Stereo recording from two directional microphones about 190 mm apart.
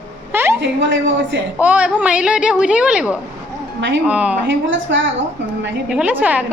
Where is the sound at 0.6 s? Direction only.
70° right (ahead or behind).